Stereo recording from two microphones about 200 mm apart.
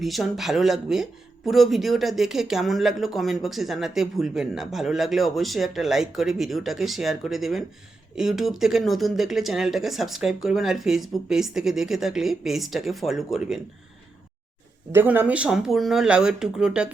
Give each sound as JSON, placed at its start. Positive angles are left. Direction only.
{"t": 0.0, "sound": "speech", "side_deg": 0}
{"t": 14.9, "sound": "speech", "side_deg": -10}